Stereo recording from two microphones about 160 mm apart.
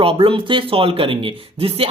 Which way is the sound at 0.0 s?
35° right (ahead or behind).